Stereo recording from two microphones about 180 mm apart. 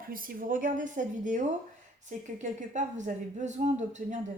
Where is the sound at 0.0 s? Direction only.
50° right (ahead or behind).